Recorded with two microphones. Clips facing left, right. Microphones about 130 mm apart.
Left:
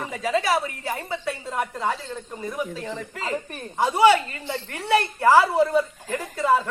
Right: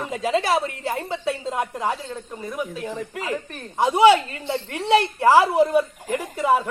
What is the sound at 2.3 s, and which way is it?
Speech, centre (ahead or behind).